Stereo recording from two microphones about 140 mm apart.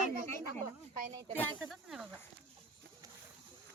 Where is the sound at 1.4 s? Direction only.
5° left (ahead or behind).